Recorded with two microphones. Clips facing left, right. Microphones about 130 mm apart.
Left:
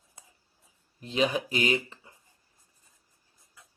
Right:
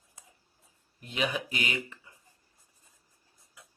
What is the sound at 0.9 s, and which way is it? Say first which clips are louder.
Speech: left 5 dB; 30° left (ahead or behind).